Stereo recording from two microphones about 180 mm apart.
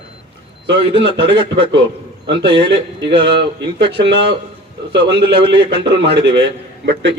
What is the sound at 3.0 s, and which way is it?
Speech, 70° right (ahead or behind).